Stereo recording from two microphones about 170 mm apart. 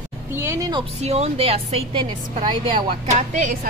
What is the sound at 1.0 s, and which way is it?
A woman's voice, 40° right (ahead or behind).